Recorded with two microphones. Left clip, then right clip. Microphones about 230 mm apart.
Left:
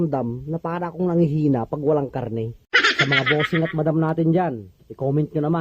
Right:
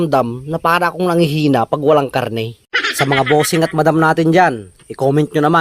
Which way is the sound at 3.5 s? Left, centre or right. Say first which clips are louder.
Right 8 dB; right.